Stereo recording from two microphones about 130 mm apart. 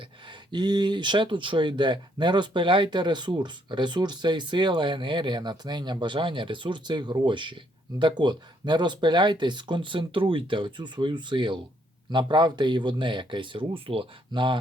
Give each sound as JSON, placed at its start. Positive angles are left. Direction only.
{"t": 0.5, "sound": "speech", "side_deg": -35}